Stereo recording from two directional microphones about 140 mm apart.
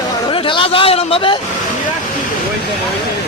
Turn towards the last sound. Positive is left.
turn(degrees=40)  # may be behind; listen again after turning